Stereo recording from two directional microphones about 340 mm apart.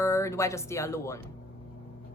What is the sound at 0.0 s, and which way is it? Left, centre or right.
A woman's voice, centre.